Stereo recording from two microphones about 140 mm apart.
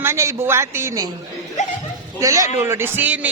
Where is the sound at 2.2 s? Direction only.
25° right (ahead or behind).